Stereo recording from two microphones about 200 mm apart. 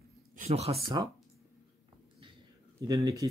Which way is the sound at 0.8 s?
20° right (ahead or behind).